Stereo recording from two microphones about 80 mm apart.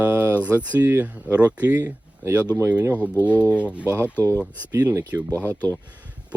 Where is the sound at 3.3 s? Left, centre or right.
Left.